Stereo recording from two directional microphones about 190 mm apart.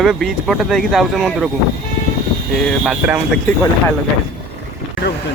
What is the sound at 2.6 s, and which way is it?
Speech, 5° right (ahead or behind).